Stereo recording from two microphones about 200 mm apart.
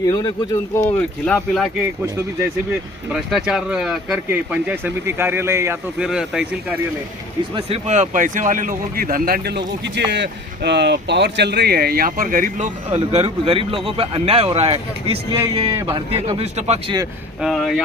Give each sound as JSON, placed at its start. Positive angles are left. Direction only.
{"t": 0.0, "sound": "speech", "side_deg": 20}
{"t": 0.9, "sound": "speech", "side_deg": 5}
{"t": 3.1, "sound": "speech", "side_deg": 0}
{"t": 7.5, "sound": "speech", "side_deg": -30}
{"t": 17.4, "sound": "speech", "side_deg": 0}